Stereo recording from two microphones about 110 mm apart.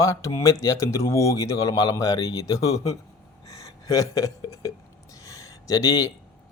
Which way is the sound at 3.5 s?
30° left (ahead or behind).